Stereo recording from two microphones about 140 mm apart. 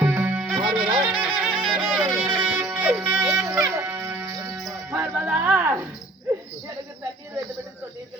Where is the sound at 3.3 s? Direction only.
20° right (ahead or behind).